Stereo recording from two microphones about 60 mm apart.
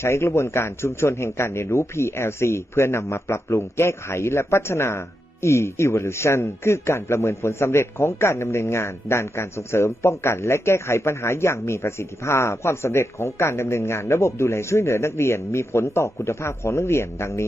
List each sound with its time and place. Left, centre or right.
0.0 s a man's voice: left